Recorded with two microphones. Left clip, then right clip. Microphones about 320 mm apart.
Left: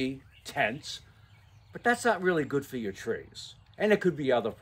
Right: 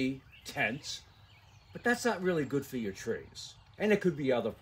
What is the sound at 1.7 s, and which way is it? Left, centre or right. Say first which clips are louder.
Speech: left 5 dB; centre.